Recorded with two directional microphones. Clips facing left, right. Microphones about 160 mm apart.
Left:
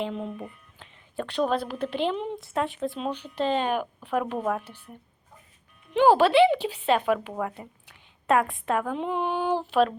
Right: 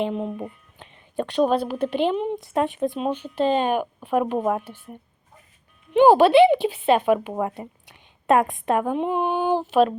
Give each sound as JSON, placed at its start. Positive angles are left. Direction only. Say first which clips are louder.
{"t": 0.0, "sound": "speech", "louder": "right 5 dB", "side_deg": -15}
{"t": 5.9, "sound": "speech", "louder": "right 5 dB", "side_deg": -20}